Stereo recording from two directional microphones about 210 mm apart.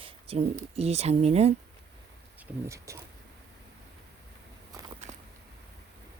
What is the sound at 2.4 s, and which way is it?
Speech, 10° right (ahead or behind).